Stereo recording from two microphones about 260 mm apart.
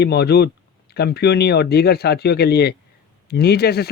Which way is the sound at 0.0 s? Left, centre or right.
Left.